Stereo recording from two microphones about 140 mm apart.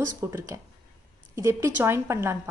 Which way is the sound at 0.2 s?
20° right (ahead or behind).